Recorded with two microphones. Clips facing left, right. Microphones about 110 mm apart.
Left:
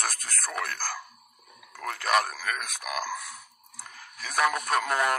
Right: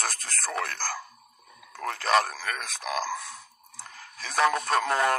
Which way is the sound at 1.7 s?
30° right (ahead or behind).